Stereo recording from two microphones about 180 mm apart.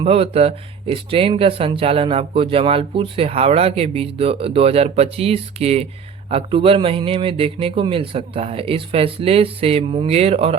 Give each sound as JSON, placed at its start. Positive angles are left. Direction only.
{"t": 0.0, "sound": "speech", "side_deg": -35}